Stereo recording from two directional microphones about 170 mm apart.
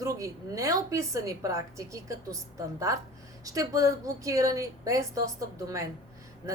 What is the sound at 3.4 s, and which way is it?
A woman's voice, 20° right (ahead or behind).